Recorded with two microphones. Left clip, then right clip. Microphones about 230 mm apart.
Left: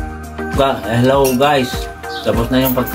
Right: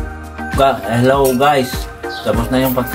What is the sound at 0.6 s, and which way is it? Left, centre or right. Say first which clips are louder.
Speech: right 2 dB; centre.